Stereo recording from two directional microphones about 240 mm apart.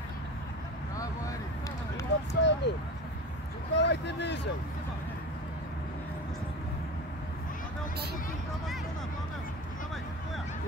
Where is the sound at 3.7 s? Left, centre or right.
Left.